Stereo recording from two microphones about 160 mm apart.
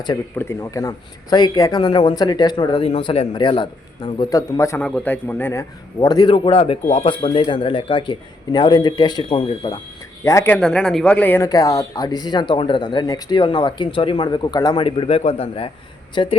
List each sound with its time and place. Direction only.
0.3 s speech: 15° left (ahead or behind)
4.8 s a man's voice: 10° left (ahead or behind); by 9.8 s 25° left (ahead or behind)
10.2 s a man's voice: 15° left (ahead or behind); by 16.3 s 30° left (ahead or behind)